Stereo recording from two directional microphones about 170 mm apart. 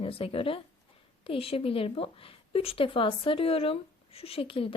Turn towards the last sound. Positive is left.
turn(degrees=30)  # may be behind; listen again after turning